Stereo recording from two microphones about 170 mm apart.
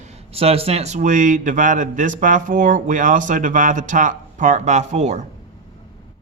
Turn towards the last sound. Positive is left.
turn(degrees=-40)  # may be behind; listen again after turning